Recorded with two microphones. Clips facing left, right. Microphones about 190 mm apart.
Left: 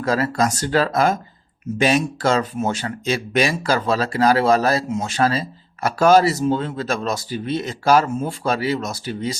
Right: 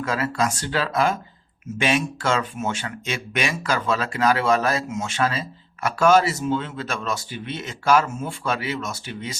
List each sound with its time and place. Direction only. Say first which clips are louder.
0.0 s speech: left 4 dB; 40° left (ahead or behind)